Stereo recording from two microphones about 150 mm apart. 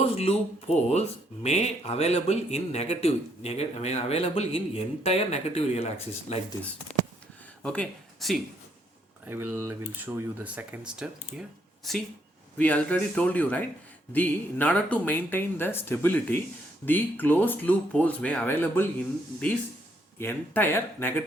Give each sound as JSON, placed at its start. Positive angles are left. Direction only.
{"t": 0.0, "sound": "speech", "side_deg": 45}
{"t": 7.6, "sound": "speech", "side_deg": 5}
{"t": 9.2, "sound": "speech", "side_deg": -15}
{"t": 20.1, "sound": "speech", "side_deg": 15}